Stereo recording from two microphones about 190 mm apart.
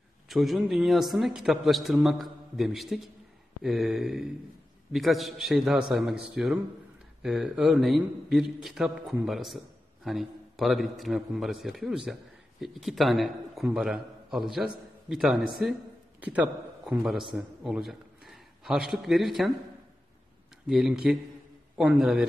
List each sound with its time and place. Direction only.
0.3 s a man's voice: centre (ahead or behind)
20.6 s a man's voice: centre (ahead or behind)